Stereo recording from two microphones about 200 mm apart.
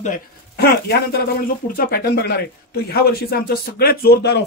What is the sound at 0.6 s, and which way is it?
Speech, 50° left (ahead or behind).